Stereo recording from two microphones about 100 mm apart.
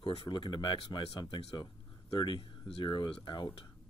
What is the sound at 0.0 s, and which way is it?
Speech, 55° left (ahead or behind).